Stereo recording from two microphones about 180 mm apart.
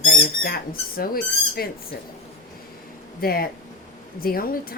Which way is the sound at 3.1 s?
55° left (ahead or behind).